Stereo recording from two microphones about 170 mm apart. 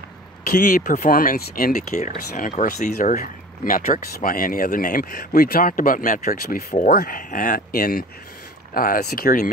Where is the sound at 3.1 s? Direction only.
55° left (ahead or behind).